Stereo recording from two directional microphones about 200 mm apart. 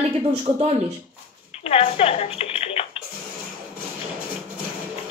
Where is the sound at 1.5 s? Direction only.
30° left (ahead or behind).